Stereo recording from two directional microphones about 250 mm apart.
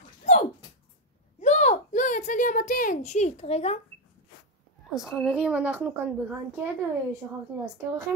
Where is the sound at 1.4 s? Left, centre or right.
Left.